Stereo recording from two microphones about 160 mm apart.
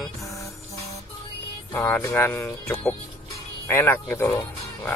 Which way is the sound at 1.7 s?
15° left (ahead or behind).